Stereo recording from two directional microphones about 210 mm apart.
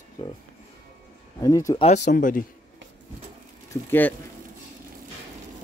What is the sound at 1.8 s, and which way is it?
Speech, 35° left (ahead or behind).